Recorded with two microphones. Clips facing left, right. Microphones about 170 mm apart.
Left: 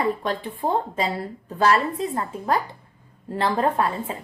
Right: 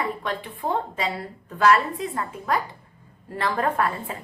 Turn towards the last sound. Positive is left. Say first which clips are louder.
# left 2 dB
turn(degrees=25)  # may be behind; listen again after turning